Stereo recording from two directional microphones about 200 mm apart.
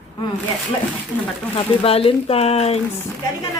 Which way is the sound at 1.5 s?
30° left (ahead or behind).